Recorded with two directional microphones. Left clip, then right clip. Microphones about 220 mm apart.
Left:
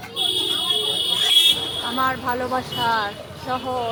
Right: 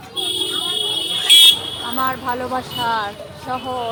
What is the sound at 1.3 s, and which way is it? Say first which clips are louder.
Vehicle: right 8 dB; 30° right (ahead or behind).